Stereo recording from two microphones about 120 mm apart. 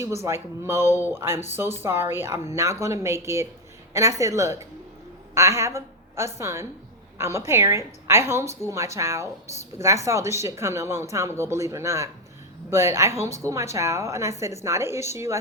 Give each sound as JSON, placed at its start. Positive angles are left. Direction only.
{"t": 0.0, "sound": "a woman's voice", "side_deg": -25}